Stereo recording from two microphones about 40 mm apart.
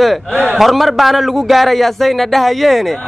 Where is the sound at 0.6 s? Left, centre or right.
Centre.